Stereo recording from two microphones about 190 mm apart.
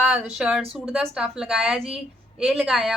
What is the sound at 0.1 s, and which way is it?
Speech, 5° right (ahead or behind).